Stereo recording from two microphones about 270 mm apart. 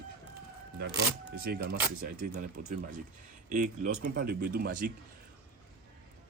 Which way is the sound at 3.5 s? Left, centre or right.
Right.